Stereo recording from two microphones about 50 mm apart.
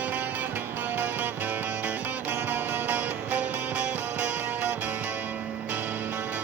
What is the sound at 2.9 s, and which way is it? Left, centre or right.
Music, right.